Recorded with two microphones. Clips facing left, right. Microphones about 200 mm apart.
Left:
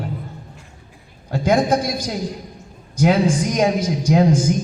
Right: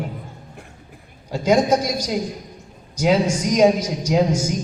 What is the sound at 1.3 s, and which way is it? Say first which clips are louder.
Speech: even; 55° left (ahead or behind).